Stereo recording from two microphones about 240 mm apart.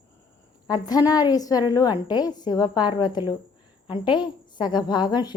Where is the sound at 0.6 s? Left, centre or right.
Centre.